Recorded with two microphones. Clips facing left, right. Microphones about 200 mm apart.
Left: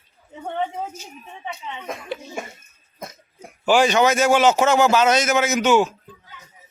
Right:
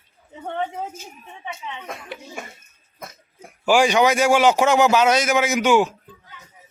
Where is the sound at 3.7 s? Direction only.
10° right (ahead or behind).